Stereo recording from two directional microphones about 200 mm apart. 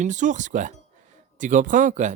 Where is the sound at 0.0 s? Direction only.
40° right (ahead or behind).